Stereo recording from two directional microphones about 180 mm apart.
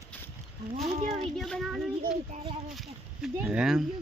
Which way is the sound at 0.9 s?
35° right (ahead or behind).